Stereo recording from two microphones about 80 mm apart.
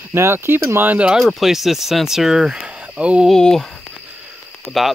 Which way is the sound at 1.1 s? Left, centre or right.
Centre.